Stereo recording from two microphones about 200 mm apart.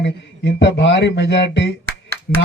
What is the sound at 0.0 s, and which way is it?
Speech, 60° left (ahead or behind).